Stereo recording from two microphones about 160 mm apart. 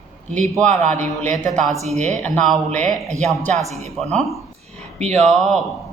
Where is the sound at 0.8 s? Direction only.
50° right (ahead or behind).